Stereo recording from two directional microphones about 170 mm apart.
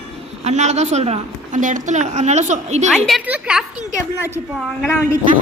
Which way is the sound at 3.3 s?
5° right (ahead or behind).